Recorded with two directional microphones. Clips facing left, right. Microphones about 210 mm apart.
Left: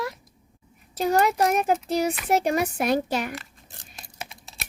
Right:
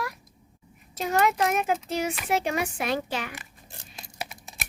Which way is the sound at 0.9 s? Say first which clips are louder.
Left 3 dB; 35° left (ahead or behind).